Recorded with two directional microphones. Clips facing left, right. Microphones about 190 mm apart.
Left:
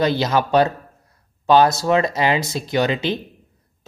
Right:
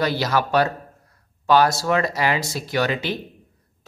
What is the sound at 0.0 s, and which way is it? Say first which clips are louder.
Speech: left 3 dB; 20° left (ahead or behind).